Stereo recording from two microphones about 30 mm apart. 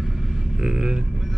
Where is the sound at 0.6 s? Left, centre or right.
Right.